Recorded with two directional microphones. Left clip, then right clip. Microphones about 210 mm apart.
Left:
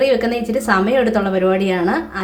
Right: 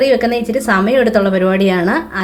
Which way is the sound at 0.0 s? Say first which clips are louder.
Right 3 dB; 15° right (ahead or behind).